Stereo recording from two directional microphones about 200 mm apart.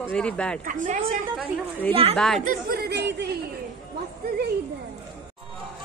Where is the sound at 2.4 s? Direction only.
50° right (ahead or behind).